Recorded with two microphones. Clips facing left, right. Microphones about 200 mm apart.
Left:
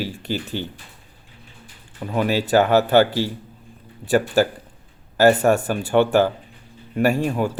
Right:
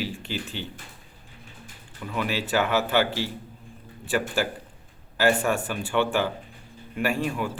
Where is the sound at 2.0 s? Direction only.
40° left (ahead or behind).